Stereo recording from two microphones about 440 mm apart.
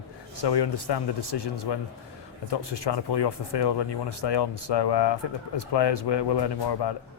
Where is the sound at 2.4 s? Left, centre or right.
Left.